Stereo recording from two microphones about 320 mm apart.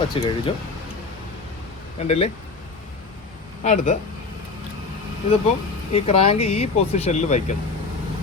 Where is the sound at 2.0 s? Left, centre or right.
Centre.